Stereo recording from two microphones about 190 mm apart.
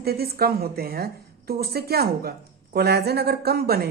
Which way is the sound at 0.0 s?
55° right (ahead or behind).